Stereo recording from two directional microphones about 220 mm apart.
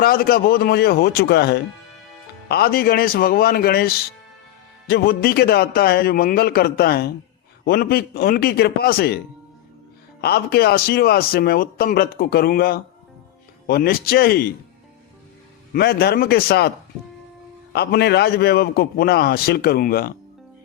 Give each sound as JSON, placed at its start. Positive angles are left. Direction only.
{"t": 0.0, "sound": "speech", "side_deg": 40}
{"t": 15.7, "sound": "speech", "side_deg": 45}
{"t": 17.7, "sound": "speech", "side_deg": 50}